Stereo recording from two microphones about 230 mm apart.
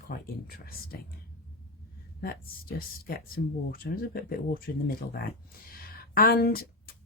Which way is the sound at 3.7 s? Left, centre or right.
Left.